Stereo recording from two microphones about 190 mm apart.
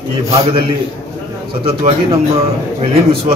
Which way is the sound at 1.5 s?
30° right (ahead or behind).